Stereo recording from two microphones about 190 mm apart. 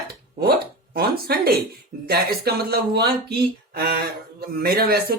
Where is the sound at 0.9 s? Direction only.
55° right (ahead or behind).